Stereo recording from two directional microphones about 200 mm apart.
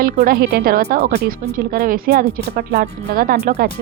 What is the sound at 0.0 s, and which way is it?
Speech, 50° right (ahead or behind).